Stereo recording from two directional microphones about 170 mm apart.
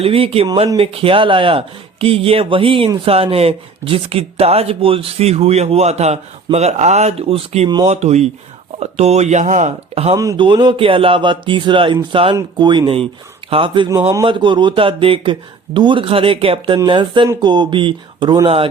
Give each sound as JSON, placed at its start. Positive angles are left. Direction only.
{"t": 0.0, "sound": "speech", "side_deg": -35}
{"t": 10.2, "sound": "speech", "side_deg": -25}